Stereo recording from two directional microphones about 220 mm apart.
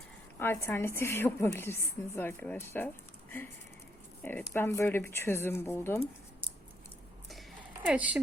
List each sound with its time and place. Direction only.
0.3 s a woman's voice: 10° left (ahead or behind)
7.9 s speech: 5° right (ahead or behind)